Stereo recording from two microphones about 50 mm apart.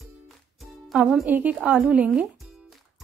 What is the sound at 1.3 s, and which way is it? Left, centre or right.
Speech, right.